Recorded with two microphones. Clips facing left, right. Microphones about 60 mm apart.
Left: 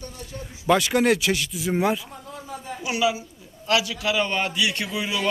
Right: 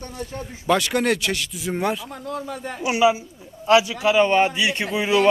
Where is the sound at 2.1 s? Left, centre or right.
Right.